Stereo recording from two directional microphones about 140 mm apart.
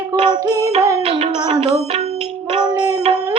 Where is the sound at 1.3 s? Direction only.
35° right (ahead or behind).